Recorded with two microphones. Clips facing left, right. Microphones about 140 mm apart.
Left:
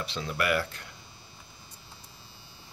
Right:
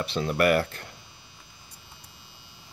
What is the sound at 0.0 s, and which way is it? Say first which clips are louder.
Speech: right 7 dB; 55° right (ahead or behind).